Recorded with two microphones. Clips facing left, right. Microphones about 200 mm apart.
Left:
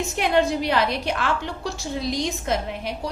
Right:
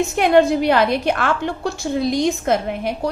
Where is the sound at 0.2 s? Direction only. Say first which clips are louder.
Right 6 dB; 55° right (ahead or behind).